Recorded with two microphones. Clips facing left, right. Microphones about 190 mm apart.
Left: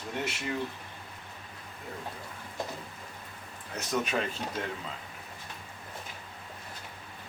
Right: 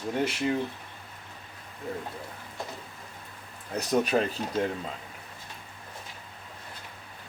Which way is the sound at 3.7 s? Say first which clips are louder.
Right 6 dB; 35° right (ahead or behind).